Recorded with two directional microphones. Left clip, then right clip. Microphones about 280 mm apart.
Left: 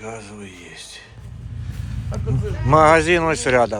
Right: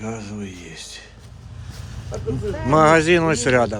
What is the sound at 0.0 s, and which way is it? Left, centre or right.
Speech, centre.